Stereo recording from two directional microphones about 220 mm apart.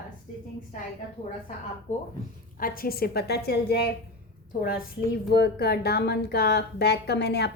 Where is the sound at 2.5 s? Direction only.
40° left (ahead or behind).